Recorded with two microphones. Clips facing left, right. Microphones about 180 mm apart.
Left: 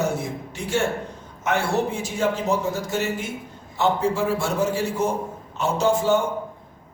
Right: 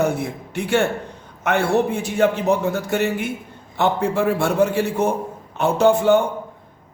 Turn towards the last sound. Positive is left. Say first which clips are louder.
# right 5 dB
turn(degrees=-60)  # may be behind; listen again after turning